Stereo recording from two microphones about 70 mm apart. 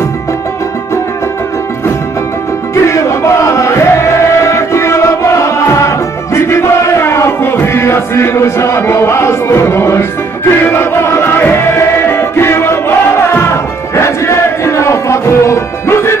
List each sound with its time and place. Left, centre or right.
2.7 s music: left